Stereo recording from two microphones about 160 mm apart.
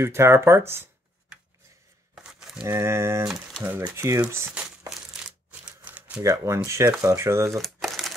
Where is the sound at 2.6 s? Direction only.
15° right (ahead or behind).